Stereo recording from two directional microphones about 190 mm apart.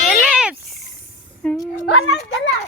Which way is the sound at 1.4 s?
5° left (ahead or behind).